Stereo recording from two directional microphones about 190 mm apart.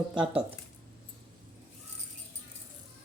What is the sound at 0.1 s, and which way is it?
Speech, 5° right (ahead or behind).